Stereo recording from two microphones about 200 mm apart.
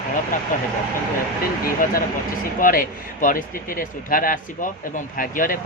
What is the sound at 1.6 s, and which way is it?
Speech, 45° left (ahead or behind).